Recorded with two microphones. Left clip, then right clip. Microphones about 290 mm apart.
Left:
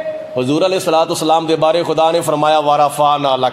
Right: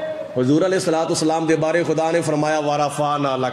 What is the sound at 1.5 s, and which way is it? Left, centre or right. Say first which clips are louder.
Speech: left 5 dB; left.